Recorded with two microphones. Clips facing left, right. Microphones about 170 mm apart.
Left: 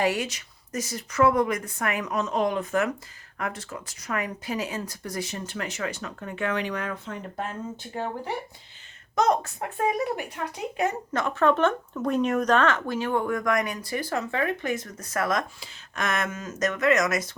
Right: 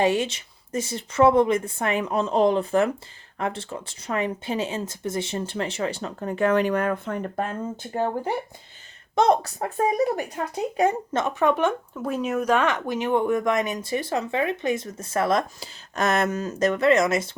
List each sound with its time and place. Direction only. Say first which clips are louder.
0.0 s speech: right 4 dB; 25° right (ahead or behind); by 8.3 s 45° right (ahead or behind)
9.1 s speech: right 3 dB; 30° right (ahead or behind)
10.8 s speech: right 4 dB; 25° right (ahead or behind)